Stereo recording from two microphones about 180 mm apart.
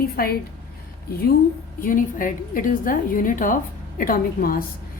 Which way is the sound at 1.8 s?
50° left (ahead or behind).